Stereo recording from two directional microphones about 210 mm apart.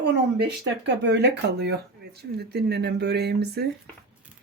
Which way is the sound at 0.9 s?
55° right (ahead or behind).